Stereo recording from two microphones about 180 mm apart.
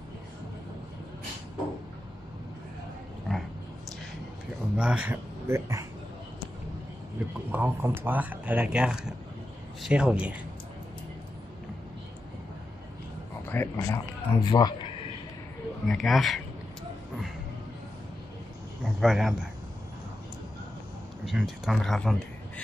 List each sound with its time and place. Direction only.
3.3 s a sound: centre (ahead or behind)
4.7 s speech: 5° right (ahead or behind)
7.5 s speech: 10° right (ahead or behind)
13.5 s speech: 15° left (ahead or behind)
15.9 s speech: centre (ahead or behind)
18.9 s speech: centre (ahead or behind)
21.3 s speech: centre (ahead or behind)